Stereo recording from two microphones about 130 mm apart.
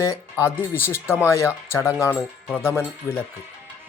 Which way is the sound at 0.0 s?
20° left (ahead or behind).